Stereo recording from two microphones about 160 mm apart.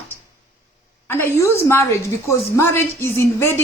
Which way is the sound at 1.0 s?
15° left (ahead or behind).